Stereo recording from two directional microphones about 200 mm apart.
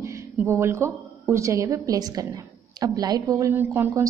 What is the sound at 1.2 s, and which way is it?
A woman's voice, 15° right (ahead or behind).